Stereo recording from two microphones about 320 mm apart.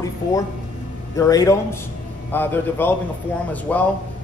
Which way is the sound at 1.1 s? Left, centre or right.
Centre.